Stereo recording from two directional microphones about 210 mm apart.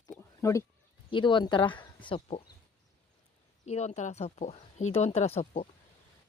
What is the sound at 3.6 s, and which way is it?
Speech, 30° left (ahead or behind).